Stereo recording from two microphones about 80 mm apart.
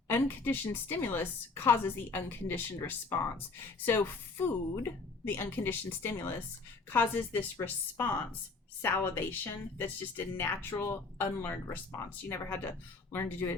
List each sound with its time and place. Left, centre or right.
0.1 s a woman's voice: left